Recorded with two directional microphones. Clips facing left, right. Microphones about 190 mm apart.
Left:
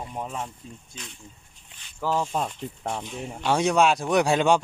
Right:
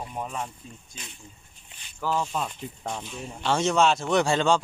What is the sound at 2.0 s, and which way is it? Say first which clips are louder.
Speech: left 2 dB; 25° left (ahead or behind).